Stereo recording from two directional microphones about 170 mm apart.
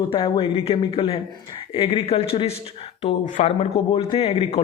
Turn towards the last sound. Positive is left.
turn(degrees=35)  # may be behind; listen again after turning